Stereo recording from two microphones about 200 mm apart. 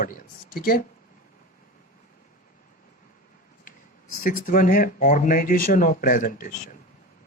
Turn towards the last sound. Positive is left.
turn(degrees=40)  # may be behind; listen again after turning